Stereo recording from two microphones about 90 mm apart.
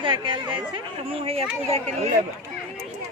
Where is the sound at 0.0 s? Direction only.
70° right (ahead or behind).